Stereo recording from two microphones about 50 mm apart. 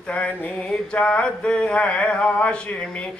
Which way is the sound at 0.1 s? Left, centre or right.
Left.